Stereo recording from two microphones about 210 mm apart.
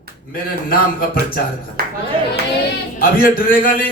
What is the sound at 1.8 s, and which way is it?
Speech, 45° right (ahead or behind).